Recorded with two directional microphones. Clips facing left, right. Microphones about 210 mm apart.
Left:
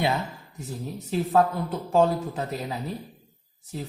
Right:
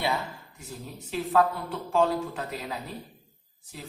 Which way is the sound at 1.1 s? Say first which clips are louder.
Left 2 dB; 40° left (ahead or behind).